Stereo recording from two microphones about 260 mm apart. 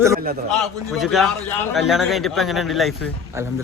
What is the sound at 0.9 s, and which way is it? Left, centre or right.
Speech, centre.